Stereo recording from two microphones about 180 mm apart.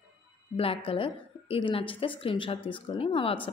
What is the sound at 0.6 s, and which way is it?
A woman's voice, 30° left (ahead or behind).